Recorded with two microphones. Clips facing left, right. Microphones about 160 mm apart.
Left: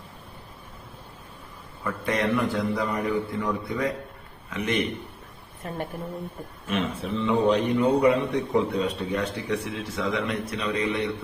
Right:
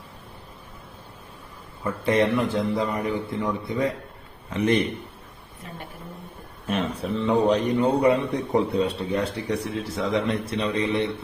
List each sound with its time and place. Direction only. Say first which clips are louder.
1.8 s a man's voice: right 5 dB; 25° right (ahead or behind)
4.4 s a man's voice: right 5 dB; 35° right (ahead or behind)
5.6 s a woman's voice: left 7 dB; 50° left (ahead or behind)
6.7 s a man's voice: right 2 dB; 40° right (ahead or behind)